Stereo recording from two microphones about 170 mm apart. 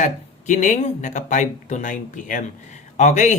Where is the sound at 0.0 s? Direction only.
45° left (ahead or behind).